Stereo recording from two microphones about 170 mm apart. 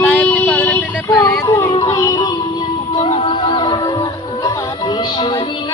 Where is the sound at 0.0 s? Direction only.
10° left (ahead or behind).